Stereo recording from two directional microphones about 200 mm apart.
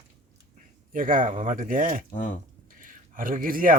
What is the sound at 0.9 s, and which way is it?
Speech, 45° right (ahead or behind).